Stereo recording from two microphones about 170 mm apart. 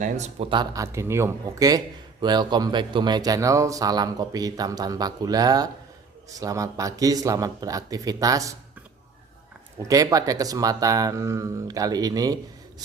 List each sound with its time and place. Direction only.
0.0 s speech: 45° right (ahead or behind)
0.5 s speech: 25° right (ahead or behind)
9.9 s speech: 20° right (ahead or behind)